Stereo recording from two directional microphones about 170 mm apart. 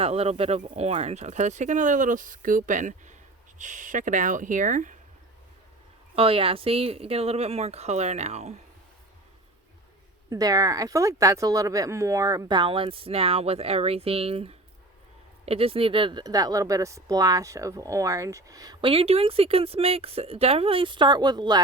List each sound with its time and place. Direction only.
0.0 s speech: 35° right (ahead or behind)
6.1 s speech: 35° right (ahead or behind)
10.2 s speech: 20° right (ahead or behind)